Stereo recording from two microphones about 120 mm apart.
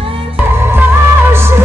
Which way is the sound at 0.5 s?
20° right (ahead or behind).